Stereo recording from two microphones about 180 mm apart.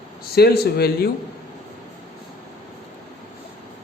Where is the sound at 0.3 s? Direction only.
60° left (ahead or behind).